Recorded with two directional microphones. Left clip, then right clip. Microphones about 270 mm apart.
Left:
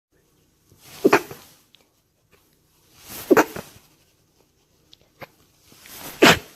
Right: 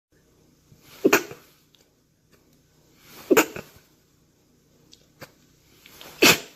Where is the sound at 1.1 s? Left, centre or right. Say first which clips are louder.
Left 2 dB; centre.